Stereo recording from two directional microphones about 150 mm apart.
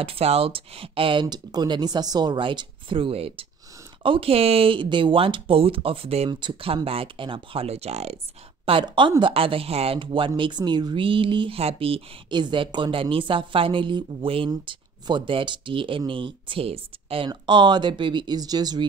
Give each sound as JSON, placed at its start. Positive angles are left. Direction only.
{"t": 0.0, "sound": "speech", "side_deg": -40}
{"t": 8.6, "sound": "speech", "side_deg": -35}